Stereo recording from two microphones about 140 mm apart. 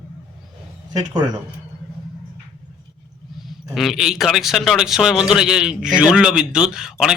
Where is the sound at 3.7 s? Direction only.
Centre (ahead or behind).